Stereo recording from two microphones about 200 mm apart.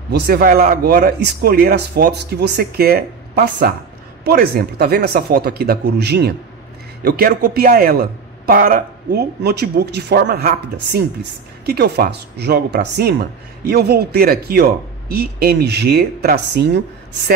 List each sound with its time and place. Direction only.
0.1 s speech: 50° right (ahead or behind)